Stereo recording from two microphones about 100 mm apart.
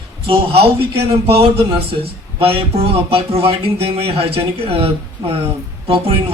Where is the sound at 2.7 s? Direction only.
75° right (ahead or behind).